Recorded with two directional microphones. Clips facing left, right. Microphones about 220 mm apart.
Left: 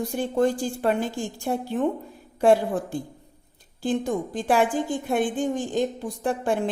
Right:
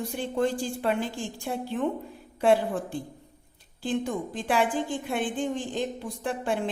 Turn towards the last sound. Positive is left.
turn(degrees=45)  # may be behind; listen again after turning